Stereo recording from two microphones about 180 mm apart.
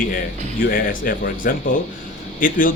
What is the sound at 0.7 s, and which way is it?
Speech, 50° left (ahead or behind).